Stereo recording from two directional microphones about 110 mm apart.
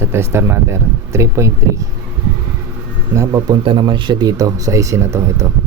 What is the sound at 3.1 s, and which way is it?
Speech, 30° right (ahead or behind).